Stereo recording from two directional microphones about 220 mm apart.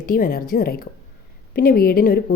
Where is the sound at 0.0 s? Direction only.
40° left (ahead or behind).